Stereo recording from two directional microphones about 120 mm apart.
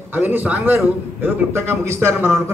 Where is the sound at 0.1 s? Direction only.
15° right (ahead or behind).